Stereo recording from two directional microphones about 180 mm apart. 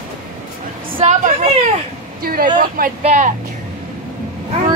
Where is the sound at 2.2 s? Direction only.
55° right (ahead or behind).